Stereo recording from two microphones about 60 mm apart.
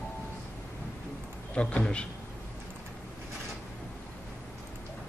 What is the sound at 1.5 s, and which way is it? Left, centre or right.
Speech, centre.